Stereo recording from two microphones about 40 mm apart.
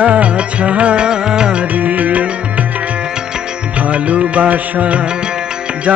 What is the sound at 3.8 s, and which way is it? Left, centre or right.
Music, right.